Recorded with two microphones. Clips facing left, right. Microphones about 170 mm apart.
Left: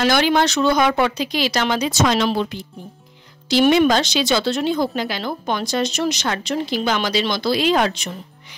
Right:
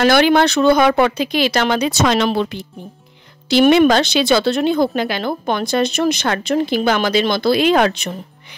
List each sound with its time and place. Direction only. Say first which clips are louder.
0.0 s speech: right 4 dB; 60° right (ahead or behind)